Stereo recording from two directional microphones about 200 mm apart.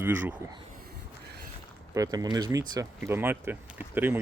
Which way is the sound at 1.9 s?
20° right (ahead or behind).